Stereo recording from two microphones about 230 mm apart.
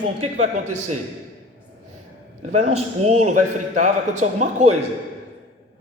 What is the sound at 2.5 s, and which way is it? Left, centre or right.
A man's voice, right.